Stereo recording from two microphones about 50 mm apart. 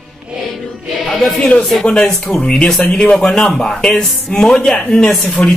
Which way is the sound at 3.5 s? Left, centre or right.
Centre.